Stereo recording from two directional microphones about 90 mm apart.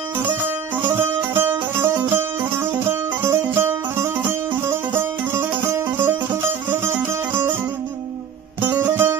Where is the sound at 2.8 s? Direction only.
25° right (ahead or behind).